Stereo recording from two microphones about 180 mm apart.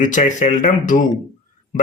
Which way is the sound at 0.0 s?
45° left (ahead or behind).